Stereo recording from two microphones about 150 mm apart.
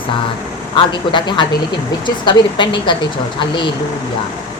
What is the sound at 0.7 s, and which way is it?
A woman's voice, 30° left (ahead or behind).